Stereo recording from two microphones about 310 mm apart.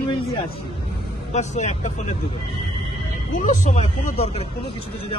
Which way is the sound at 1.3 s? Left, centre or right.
Left.